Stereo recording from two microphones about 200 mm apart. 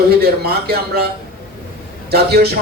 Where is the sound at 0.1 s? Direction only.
50° right (ahead or behind).